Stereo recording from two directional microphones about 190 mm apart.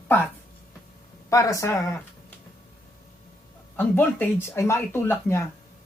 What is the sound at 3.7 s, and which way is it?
Speech, 10° left (ahead or behind).